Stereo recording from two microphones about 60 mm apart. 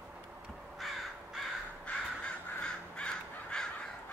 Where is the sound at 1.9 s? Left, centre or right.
Centre.